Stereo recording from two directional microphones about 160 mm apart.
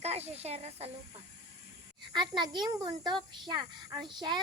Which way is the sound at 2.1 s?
25° right (ahead or behind).